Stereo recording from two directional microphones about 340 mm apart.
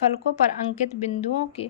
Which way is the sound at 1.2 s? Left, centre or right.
Centre.